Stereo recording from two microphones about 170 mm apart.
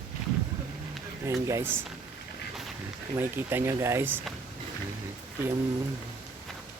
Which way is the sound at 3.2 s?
15° right (ahead or behind).